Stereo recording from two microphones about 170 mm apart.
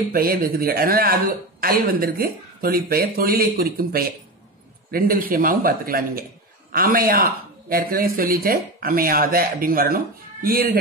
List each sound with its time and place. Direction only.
0.1 s speech: 60° right (ahead or behind)